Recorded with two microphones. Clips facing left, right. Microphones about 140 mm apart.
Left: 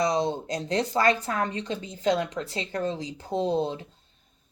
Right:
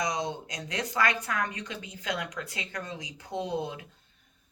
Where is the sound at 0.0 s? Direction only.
30° left (ahead or behind).